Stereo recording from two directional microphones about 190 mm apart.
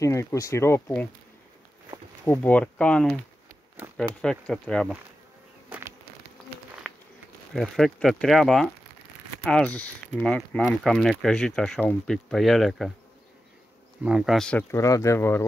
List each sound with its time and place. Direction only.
0.0 s speech: 15° left (ahead or behind)
2.2 s speech: 10° left (ahead or behind)
6.8 s a sound: centre (ahead or behind)
7.5 s speech: centre (ahead or behind)
14.0 s speech: 5° right (ahead or behind); by 15.4 s 10° left (ahead or behind)